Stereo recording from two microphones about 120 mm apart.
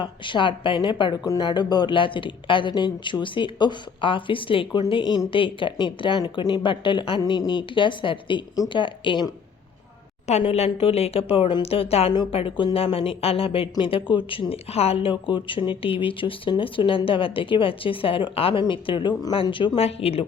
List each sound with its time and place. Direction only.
0.0 s speech: 45° left (ahead or behind)
10.5 s speech: 55° left (ahead or behind)